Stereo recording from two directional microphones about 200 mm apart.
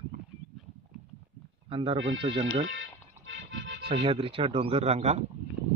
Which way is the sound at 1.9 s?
70° right (ahead or behind).